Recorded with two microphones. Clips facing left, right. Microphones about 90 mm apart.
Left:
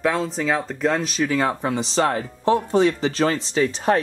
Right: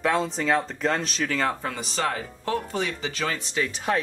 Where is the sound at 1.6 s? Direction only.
25° left (ahead or behind).